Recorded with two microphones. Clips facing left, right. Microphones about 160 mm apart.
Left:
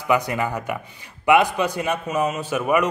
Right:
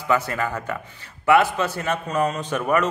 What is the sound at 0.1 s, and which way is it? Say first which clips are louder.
A man's voice: left 1 dB; 15° left (ahead or behind).